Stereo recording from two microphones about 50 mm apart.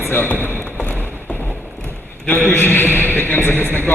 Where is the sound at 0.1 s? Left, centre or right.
Left.